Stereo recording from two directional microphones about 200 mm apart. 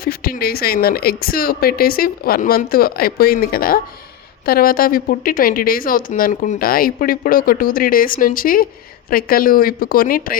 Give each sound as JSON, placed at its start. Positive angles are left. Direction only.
{"t": 0.0, "sound": "a woman's voice", "side_deg": 50}